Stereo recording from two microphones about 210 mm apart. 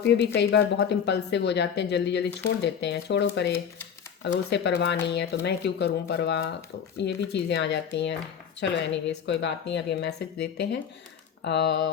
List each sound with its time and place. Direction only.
0.3 s a woman's voice: 55° left (ahead or behind)